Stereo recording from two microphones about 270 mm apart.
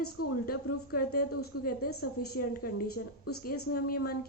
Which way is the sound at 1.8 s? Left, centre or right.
Left.